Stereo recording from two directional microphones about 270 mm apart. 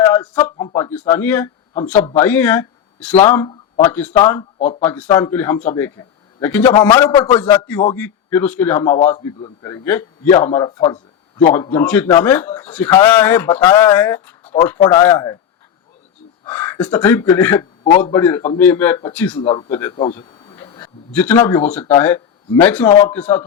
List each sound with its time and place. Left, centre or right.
0.0 s a sound: centre
0.5 s a man's voice: centre
3.8 s a man's voice: centre; by 11.5 s left
11.5 s a man's voice: centre
14.4 s a sound: left
14.8 s a man's voice: centre
16.4 s a man's voice: centre
19.4 s speech: centre
19.7 s a man's voice: centre
20.1 s a man's voice: centre